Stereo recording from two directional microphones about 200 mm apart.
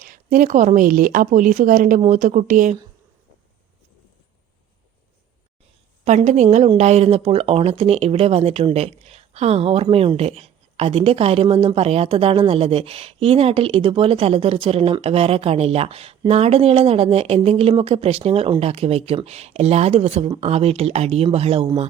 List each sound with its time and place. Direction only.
0.0 s a woman's voice: 45° right (ahead or behind)
6.1 s speech: 35° right (ahead or behind)